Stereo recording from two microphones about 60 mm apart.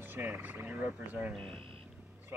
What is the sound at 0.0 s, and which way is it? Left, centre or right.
Speech, right.